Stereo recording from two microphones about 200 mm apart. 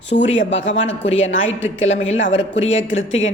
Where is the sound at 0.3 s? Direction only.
70° left (ahead or behind).